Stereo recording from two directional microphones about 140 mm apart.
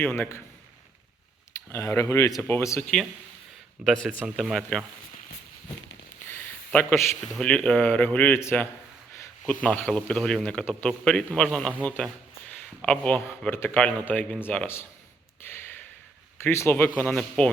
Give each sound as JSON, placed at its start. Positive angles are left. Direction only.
{"t": 0.0, "sound": "a man's voice", "side_deg": 15}
{"t": 1.7, "sound": "speech", "side_deg": 20}
{"t": 3.8, "sound": "a man's voice", "side_deg": 5}
{"t": 7.3, "sound": "a man's voice", "side_deg": 5}
{"t": 15.4, "sound": "a sound", "side_deg": 15}
{"t": 16.4, "sound": "a man's voice", "side_deg": 15}
{"t": 17.1, "sound": "a man's voice", "side_deg": 5}